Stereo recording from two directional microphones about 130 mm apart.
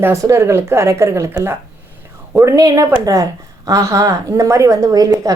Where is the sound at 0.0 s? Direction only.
20° right (ahead or behind).